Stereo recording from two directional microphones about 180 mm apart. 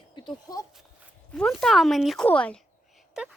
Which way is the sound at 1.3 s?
Centre (ahead or behind).